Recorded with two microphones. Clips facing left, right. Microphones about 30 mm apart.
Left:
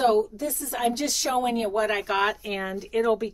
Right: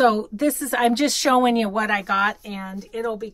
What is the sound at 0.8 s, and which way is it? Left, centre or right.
Speech, right.